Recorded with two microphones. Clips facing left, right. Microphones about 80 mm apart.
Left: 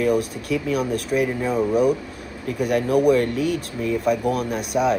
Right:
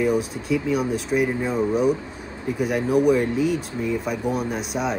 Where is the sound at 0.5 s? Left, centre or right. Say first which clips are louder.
Even; right.